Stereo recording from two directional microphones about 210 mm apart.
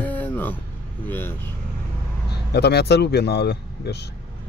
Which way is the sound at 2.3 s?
50° left (ahead or behind).